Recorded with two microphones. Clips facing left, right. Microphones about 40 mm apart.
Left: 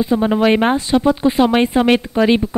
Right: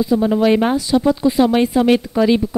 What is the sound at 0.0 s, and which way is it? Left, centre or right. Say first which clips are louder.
A woman's voice: even; left.